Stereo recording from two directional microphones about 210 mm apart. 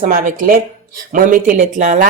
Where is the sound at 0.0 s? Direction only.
40° right (ahead or behind).